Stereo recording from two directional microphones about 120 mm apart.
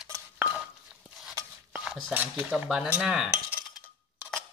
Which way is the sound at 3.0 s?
5° right (ahead or behind).